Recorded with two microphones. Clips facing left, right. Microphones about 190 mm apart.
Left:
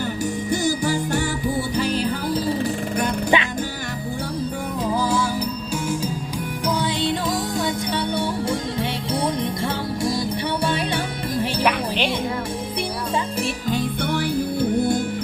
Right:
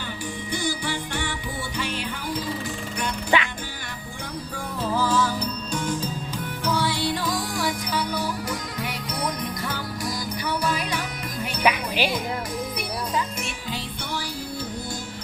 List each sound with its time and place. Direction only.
0.5 s music: 40° left (ahead or behind)
3.3 s music: 20° left (ahead or behind)
4.8 s music: 15° left (ahead or behind); by 11.4 s 30° left (ahead or behind)
11.6 s music: 5° right (ahead or behind)
13.7 s music: 50° left (ahead or behind)